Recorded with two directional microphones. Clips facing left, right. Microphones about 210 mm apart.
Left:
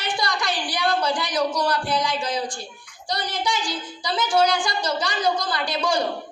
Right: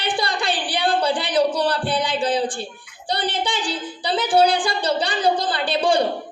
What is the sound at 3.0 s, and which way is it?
A man's voice, 30° right (ahead or behind).